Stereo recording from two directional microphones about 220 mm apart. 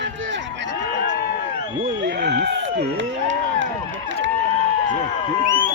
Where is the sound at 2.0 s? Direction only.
50° right (ahead or behind).